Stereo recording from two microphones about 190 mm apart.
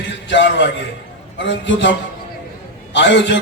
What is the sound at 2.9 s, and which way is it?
Speech, 65° left (ahead or behind).